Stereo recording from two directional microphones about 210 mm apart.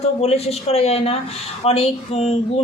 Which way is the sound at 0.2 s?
30° left (ahead or behind).